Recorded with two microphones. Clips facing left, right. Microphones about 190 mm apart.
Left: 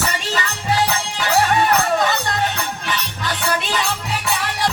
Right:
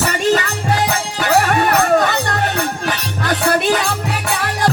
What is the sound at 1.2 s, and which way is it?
Music, 55° right (ahead or behind).